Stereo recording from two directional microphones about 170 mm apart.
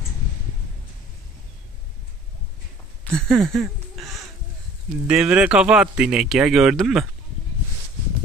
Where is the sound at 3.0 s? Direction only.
5° left (ahead or behind).